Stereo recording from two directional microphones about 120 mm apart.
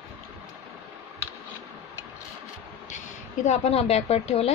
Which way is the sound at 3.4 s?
70° left (ahead or behind).